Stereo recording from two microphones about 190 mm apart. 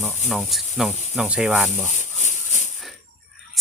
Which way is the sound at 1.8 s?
40° left (ahead or behind).